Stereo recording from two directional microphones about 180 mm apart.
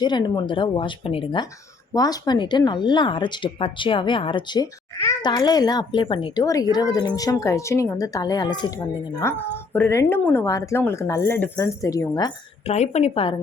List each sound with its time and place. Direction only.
0.0 s speech: 25° left (ahead or behind)
12.6 s a woman's voice: 40° left (ahead or behind)